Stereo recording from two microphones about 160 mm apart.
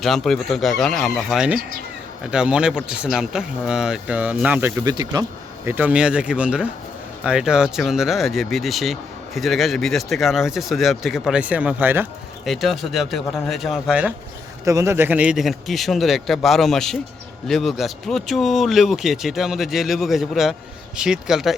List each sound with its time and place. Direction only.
0.0 s speech: centre (ahead or behind)
4.8 s speech: 25° right (ahead or behind)
5.6 s speech: 10° right (ahead or behind)
12.5 s speech: centre (ahead or behind)
14.6 s speech: 20° right (ahead or behind); by 21.5 s 5° right (ahead or behind)